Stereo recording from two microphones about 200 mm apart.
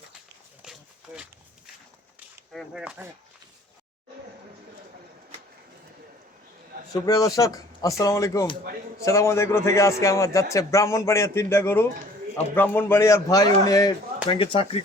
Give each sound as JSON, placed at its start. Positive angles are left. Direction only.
{"t": 0.6, "sound": "a sound", "side_deg": -5}
{"t": 2.5, "sound": "speech", "side_deg": 0}
{"t": 6.9, "sound": "speech", "side_deg": 15}